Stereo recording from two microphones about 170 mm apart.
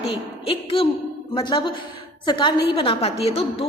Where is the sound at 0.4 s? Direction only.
35° left (ahead or behind).